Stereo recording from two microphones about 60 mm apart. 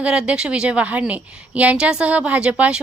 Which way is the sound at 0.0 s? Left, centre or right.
Centre.